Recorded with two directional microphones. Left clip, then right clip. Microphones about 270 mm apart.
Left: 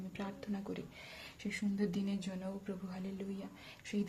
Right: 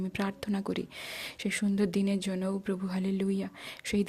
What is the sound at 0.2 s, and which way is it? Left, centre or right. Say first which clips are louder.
Speech: right 9 dB; right.